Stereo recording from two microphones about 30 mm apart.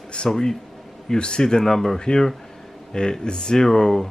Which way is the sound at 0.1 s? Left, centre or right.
Left.